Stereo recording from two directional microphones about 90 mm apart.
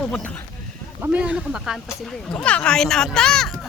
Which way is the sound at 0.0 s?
15° left (ahead or behind).